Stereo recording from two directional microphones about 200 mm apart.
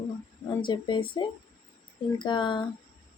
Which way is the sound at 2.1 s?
25° left (ahead or behind).